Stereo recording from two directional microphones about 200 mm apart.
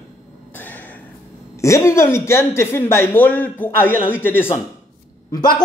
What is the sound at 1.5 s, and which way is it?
A woman's voice, 15° left (ahead or behind).